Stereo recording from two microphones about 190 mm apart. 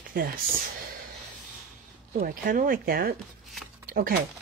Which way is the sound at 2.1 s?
45° right (ahead or behind).